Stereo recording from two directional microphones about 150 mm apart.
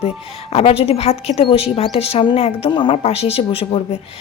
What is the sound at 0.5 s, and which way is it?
A woman's voice, 40° left (ahead or behind).